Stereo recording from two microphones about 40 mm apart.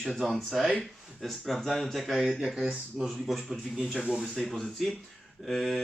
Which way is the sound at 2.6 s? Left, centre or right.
Centre.